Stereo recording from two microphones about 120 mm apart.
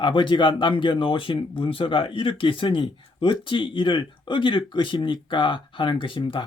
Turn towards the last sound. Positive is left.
turn(degrees=45)  # may be behind; listen again after turning